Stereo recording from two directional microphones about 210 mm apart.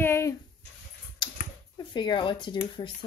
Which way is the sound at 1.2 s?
20° left (ahead or behind).